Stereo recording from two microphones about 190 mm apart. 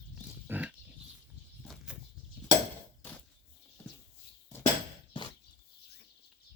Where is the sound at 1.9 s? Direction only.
5° right (ahead or behind).